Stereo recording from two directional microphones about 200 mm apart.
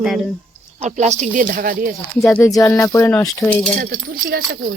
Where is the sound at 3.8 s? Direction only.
45° right (ahead or behind).